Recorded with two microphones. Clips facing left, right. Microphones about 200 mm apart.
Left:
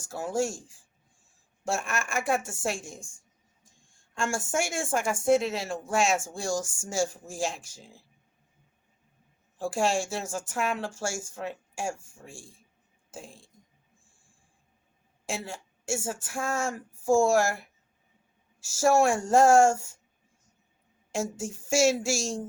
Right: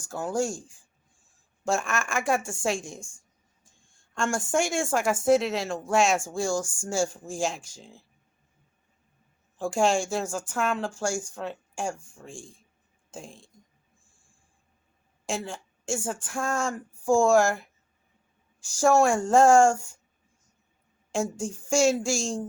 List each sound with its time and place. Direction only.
1.7 s speech: centre (ahead or behind)
4.1 s speech: 5° left (ahead or behind)
9.6 s speech: centre (ahead or behind)
15.3 s speech: 5° left (ahead or behind)
21.2 s speech: 5° left (ahead or behind)